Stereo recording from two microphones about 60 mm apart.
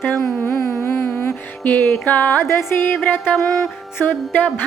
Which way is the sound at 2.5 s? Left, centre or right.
Left.